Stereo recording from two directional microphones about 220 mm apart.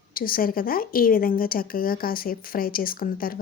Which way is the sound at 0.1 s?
40° left (ahead or behind).